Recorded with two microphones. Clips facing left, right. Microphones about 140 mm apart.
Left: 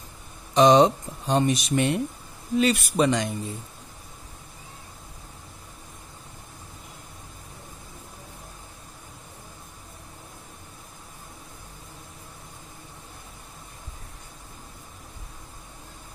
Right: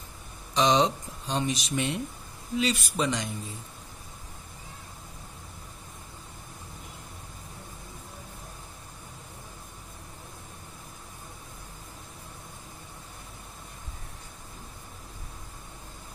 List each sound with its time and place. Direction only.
0.6 s speech: 50° left (ahead or behind)